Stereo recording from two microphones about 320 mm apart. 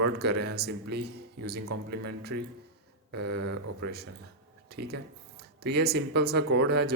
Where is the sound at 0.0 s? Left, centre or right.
Right.